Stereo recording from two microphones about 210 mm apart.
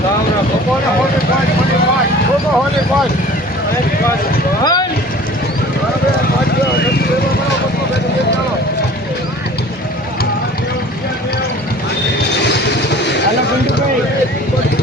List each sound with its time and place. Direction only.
4.6 s speech: 20° left (ahead or behind)